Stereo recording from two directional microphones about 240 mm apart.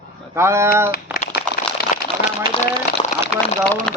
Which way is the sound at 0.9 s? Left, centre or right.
Left.